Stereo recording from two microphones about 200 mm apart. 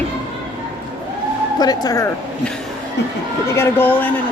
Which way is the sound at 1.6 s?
20° left (ahead or behind).